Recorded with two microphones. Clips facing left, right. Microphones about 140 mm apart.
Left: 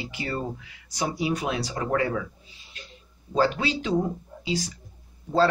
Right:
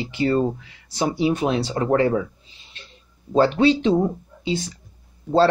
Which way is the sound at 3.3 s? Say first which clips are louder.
Right 7 dB; 30° right (ahead or behind).